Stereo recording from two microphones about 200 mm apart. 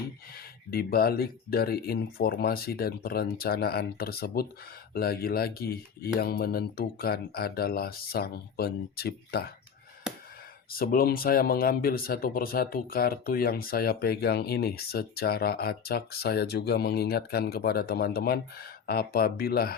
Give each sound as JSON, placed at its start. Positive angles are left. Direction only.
{"t": 0.7, "sound": "speech", "side_deg": 50}
{"t": 10.7, "sound": "speech", "side_deg": 45}